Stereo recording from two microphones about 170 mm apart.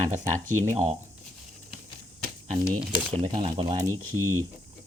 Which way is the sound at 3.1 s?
30° right (ahead or behind).